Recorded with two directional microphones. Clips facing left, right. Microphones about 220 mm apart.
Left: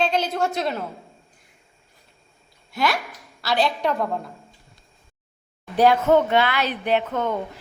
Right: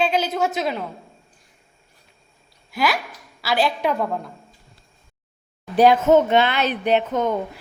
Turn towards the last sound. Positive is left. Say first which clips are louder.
# right 3 dB
turn(degrees=-15)  # may be behind; listen again after turning